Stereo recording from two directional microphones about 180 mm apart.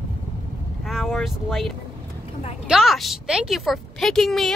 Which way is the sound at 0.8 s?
Centre (ahead or behind).